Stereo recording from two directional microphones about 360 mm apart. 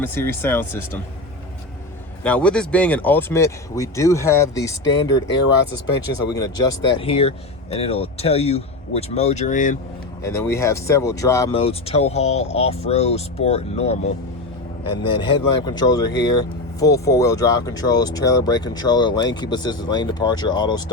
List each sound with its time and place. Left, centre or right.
0.0 s speech: centre
2.2 s speech: centre
6.3 s speech: centre
10.2 s speech: centre
15.1 s speech: centre